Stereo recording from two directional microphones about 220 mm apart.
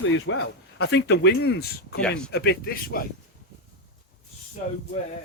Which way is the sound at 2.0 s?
5° left (ahead or behind).